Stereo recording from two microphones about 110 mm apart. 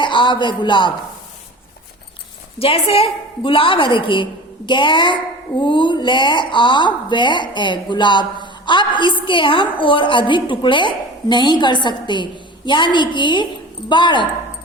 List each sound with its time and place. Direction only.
0.0 s speech: 45° left (ahead or behind)
2.6 s a woman's voice: 60° left (ahead or behind)